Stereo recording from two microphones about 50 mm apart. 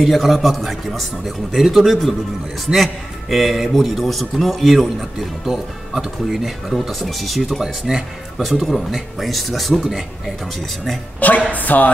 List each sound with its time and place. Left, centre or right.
0.0 s a man's voice: centre
7.6 s speech: centre
8.4 s a man's voice: centre
11.1 s music: left